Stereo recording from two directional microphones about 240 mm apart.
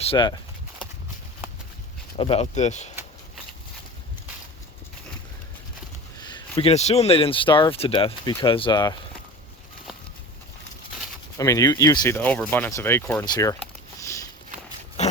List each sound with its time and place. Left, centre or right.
0.0 s speech: left
2.1 s speech: left
6.1 s speech: centre
11.3 s speech: centre